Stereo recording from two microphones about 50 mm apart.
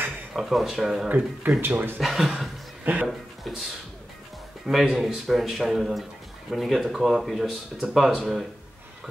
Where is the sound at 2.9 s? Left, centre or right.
Right.